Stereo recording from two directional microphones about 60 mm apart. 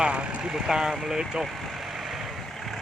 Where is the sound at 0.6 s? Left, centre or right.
Centre.